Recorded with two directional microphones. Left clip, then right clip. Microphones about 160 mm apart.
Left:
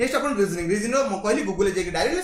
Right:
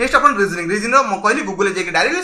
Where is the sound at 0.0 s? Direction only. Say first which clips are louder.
Right 9 dB; 35° left (ahead or behind).